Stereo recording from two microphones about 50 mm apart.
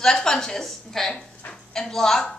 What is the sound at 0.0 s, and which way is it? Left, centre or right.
A woman's voice, centre.